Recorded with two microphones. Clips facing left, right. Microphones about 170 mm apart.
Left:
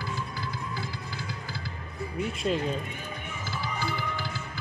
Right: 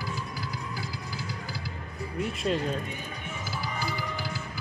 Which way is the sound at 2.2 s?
Centre (ahead or behind).